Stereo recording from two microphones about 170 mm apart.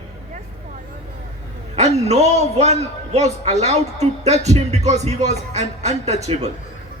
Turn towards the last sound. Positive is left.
turn(degrees=-40)  # may be behind; listen again after turning